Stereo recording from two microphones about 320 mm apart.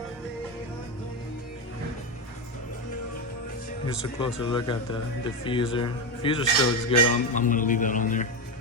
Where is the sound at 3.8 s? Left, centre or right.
Centre.